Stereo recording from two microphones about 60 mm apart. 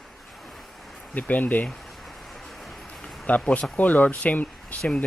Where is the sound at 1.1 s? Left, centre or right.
Left.